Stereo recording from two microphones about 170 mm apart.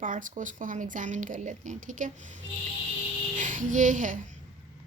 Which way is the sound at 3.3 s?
50° right (ahead or behind).